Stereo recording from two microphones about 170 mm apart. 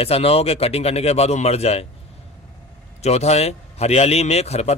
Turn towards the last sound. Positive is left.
turn(degrees=40)  # may be behind; listen again after turning